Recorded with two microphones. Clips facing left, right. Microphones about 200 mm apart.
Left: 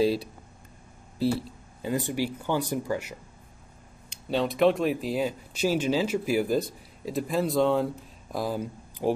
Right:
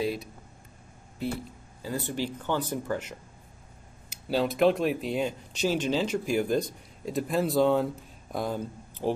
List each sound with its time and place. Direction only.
0.0 s speech: 30° left (ahead or behind)
1.8 s speech: 20° left (ahead or behind)
4.1 s speech: centre (ahead or behind)